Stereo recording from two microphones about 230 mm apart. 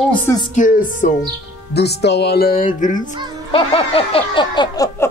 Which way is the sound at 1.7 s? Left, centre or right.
Left.